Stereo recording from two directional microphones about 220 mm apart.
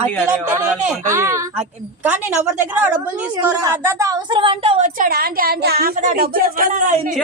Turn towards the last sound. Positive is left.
turn(degrees=-35)  # may be behind; listen again after turning